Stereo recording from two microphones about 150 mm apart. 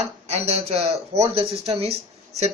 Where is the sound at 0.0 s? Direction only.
45° right (ahead or behind).